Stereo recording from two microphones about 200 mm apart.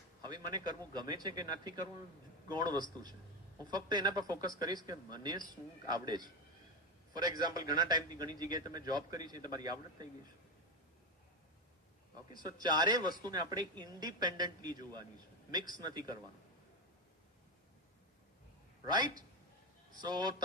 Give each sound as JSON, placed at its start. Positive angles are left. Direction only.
{"t": 0.2, "sound": "speech", "side_deg": -20}
{"t": 12.3, "sound": "speech", "side_deg": -20}
{"t": 15.8, "sound": "speech", "side_deg": -20}
{"t": 20.0, "sound": "speech", "side_deg": -20}